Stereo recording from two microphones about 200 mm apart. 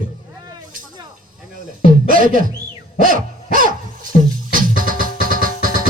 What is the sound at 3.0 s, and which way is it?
Owl, 45° right (ahead or behind).